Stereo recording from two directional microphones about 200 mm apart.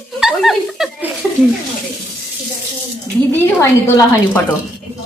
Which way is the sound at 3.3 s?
10° left (ahead or behind).